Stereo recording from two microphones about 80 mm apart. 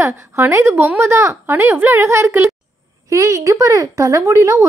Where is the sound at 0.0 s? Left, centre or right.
Right.